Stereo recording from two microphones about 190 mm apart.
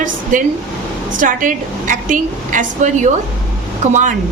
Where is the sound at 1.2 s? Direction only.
45° right (ahead or behind).